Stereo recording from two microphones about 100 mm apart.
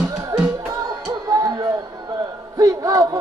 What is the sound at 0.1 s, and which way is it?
Music, 30° right (ahead or behind).